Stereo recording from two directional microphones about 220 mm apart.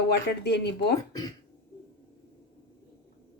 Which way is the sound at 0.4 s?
50° left (ahead or behind).